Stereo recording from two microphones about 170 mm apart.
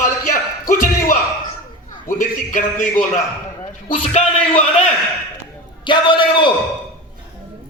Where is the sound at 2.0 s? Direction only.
50° left (ahead or behind).